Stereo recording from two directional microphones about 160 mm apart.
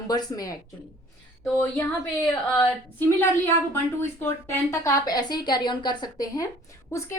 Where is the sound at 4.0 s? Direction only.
15° left (ahead or behind).